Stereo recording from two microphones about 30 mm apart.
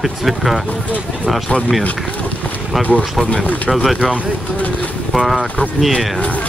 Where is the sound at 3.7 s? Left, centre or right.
Centre.